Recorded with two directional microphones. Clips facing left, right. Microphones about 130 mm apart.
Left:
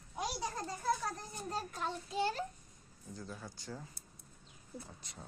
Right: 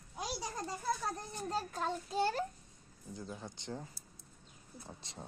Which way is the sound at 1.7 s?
40° right (ahead or behind).